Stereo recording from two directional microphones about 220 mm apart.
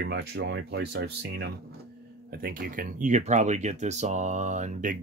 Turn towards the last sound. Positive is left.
turn(degrees=-35)  # may be behind; listen again after turning